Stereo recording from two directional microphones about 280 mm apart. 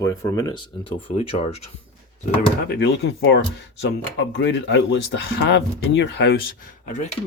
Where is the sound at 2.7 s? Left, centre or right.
Left.